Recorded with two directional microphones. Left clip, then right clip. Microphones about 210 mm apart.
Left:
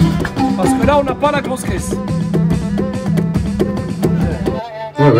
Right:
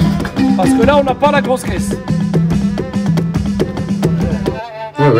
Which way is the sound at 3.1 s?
Centre (ahead or behind).